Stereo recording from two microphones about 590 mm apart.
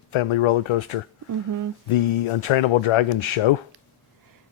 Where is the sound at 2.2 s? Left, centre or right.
Left.